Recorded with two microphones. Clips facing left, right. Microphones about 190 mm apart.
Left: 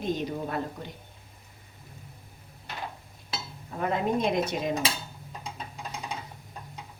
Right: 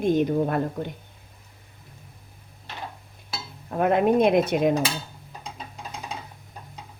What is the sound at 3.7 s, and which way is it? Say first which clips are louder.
Dishes: right 8 dB; 65° right (ahead or behind).